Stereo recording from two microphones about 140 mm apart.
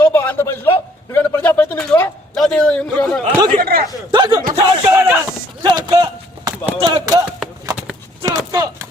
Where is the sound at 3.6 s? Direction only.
90° right.